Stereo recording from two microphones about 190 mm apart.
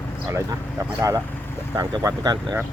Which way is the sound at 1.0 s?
15° right (ahead or behind).